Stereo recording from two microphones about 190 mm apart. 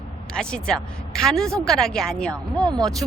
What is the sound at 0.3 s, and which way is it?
Speech, 5° left (ahead or behind).